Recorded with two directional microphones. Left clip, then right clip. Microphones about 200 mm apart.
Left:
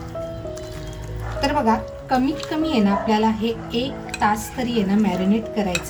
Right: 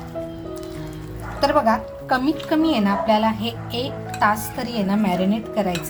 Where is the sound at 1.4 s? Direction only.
30° right (ahead or behind).